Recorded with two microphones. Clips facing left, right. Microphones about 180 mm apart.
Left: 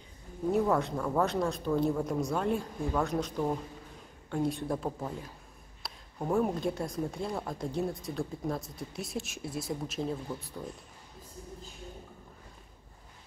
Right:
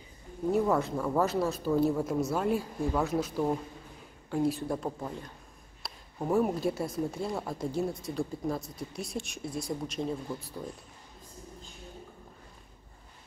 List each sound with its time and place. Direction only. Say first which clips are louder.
0.5 s speech: right 1 dB; centre (ahead or behind)